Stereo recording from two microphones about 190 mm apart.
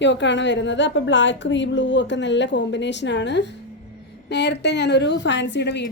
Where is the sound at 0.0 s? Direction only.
70° left (ahead or behind).